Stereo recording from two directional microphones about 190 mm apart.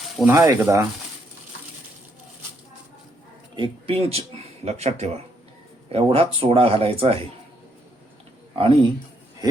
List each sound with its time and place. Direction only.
0.3 s speech: 15° right (ahead or behind)
3.5 s speech: 25° right (ahead or behind)
8.5 s speech: 30° right (ahead or behind)